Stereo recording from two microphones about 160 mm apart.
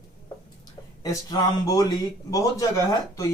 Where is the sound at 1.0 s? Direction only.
25° left (ahead or behind).